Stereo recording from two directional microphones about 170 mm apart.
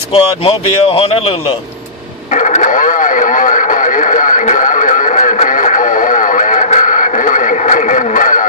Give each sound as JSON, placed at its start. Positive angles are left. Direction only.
{"t": 0.1, "sound": "speech", "side_deg": 35}
{"t": 2.3, "sound": "radio", "side_deg": 45}